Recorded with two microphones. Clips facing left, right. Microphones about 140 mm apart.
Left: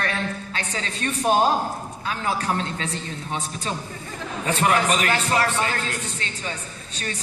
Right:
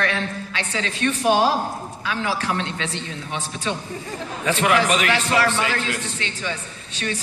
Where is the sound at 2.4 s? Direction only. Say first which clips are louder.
Even; 35° left (ahead or behind).